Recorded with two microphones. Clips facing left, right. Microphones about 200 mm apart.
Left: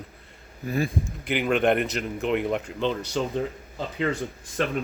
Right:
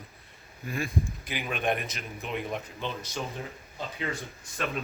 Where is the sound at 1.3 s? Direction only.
75° left (ahead or behind).